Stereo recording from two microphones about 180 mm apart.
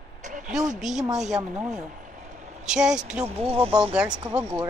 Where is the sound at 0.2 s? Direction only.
45° right (ahead or behind).